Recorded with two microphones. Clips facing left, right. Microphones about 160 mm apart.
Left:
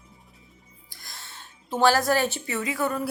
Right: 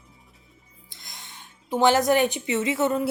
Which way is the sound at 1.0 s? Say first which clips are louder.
Left 1 dB; 15° right (ahead or behind).